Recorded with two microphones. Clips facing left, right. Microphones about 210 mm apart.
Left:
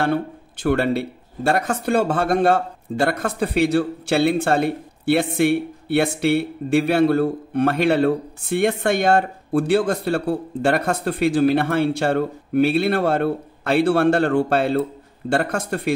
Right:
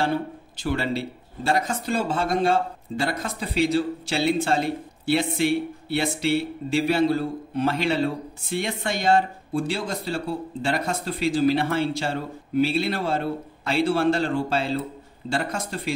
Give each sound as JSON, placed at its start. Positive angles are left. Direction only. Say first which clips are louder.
{"t": 0.0, "sound": "speech", "louder": "left 4 dB", "side_deg": 60}